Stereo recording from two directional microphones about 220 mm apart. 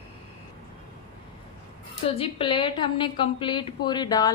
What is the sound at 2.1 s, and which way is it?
A woman's voice, 25° left (ahead or behind).